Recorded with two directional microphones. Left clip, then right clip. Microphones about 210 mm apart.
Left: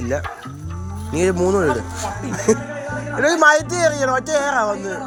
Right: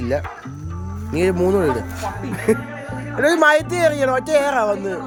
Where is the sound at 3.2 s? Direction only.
15° right (ahead or behind).